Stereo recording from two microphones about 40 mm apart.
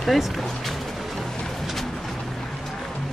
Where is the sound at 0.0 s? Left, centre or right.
Centre.